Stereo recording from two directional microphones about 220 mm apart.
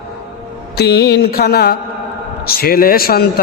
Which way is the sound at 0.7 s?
45° left (ahead or behind).